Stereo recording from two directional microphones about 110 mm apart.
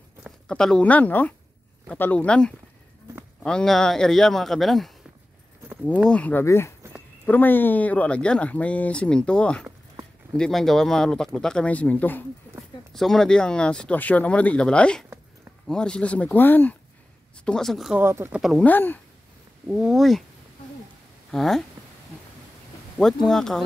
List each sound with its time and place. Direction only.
0.5 s a man's voice: 5° left (ahead or behind)
6.0 s speech: 10° left (ahead or behind)
6.4 s speech: 25° left (ahead or behind)
12.9 s speech: 5° left (ahead or behind)
17.5 s a man's voice: 5° left (ahead or behind)
17.9 s speech: 25° right (ahead or behind)
18.3 s a man's voice: centre (ahead or behind)
18.6 s speech: 15° left (ahead or behind)
19.7 s a man's voice: 5° right (ahead or behind)
21.3 s speech: 5° left (ahead or behind)
22.9 s a man's voice: 5° left (ahead or behind)